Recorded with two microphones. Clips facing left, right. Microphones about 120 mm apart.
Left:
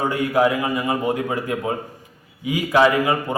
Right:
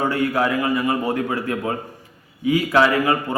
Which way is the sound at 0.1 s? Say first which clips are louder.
Left 2 dB; 20° left (ahead or behind).